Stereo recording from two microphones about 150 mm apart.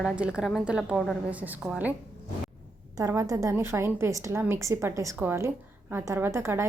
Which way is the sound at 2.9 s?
20° right (ahead or behind).